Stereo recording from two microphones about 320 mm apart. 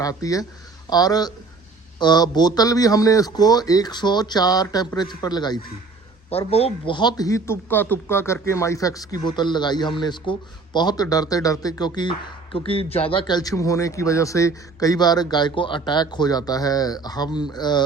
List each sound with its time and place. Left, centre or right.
0.0 s speech: centre